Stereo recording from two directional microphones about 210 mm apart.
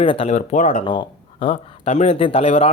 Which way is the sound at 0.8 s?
20° left (ahead or behind).